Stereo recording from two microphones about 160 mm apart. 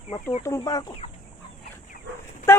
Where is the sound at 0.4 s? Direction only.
20° left (ahead or behind).